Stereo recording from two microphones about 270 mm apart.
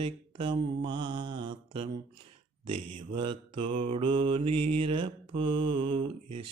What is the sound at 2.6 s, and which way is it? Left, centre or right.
Mantra, right.